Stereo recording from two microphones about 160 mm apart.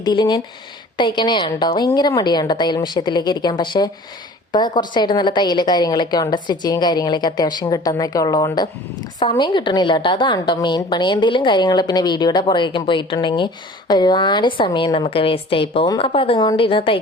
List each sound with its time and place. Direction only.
0.0 s a woman's voice: 30° left (ahead or behind)